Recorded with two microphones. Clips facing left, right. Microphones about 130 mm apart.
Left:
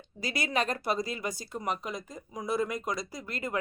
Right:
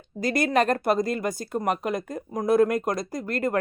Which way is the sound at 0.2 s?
50° right (ahead or behind).